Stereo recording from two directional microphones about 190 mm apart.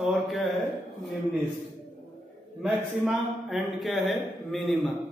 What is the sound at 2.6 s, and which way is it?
A man's voice, centre (ahead or behind).